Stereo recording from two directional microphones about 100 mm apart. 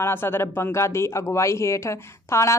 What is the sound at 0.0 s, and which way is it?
Speech, 20° left (ahead or behind).